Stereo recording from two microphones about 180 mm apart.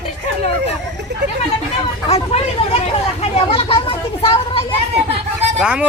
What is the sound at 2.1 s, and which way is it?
Speech, 35° left (ahead or behind).